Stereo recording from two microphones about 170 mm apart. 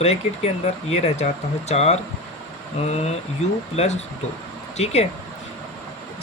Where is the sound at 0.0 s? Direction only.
40° left (ahead or behind).